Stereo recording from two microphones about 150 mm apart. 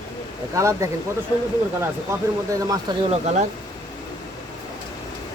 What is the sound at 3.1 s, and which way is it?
Speech, 45° right (ahead or behind).